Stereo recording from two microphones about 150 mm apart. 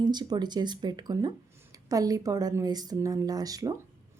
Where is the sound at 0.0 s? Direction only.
30° right (ahead or behind).